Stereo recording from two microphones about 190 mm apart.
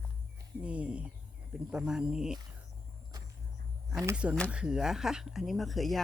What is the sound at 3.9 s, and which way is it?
Speech, 15° right (ahead or behind).